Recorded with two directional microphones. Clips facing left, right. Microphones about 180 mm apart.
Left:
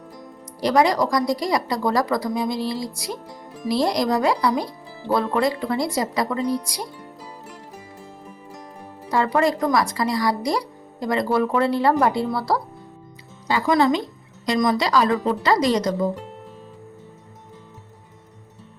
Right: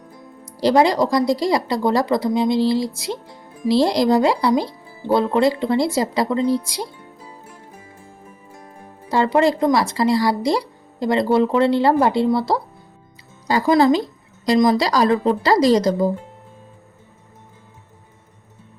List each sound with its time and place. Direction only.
0.4 s speech: 25° right (ahead or behind)
7.2 s music: 75° left (ahead or behind)
9.0 s speech: 25° right (ahead or behind)
13.5 s a woman's voice: 40° right (ahead or behind)